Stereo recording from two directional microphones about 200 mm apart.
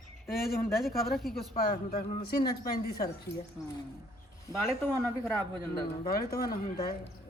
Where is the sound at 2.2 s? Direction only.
50° left (ahead or behind).